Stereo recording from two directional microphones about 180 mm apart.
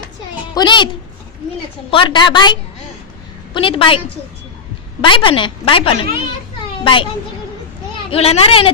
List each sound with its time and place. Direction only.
0.5 s a sound: 25° left (ahead or behind)
1.9 s a woman's voice: 30° left (ahead or behind)
5.0 s a woman's voice: 30° left (ahead or behind)